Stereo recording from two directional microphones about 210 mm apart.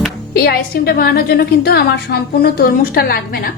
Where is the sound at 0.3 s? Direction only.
45° left (ahead or behind).